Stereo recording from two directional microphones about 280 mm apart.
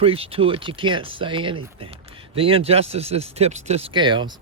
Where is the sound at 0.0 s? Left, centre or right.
Centre.